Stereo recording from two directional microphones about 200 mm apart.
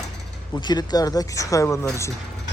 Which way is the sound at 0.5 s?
20° left (ahead or behind).